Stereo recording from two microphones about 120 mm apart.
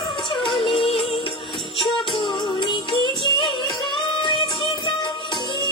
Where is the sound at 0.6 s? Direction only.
50° left (ahead or behind).